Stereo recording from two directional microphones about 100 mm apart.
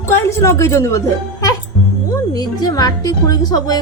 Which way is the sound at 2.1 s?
40° left (ahead or behind).